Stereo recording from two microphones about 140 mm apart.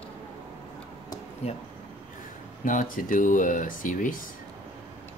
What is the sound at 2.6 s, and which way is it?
Speech, 70° left (ahead or behind).